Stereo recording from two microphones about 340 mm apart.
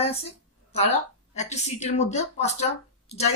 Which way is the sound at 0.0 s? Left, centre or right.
Centre.